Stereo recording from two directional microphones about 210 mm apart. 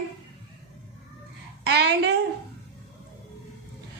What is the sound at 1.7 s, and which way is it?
Speech, 50° right (ahead or behind).